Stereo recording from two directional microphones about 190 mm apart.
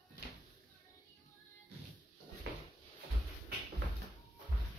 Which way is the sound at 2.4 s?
60° right (ahead or behind).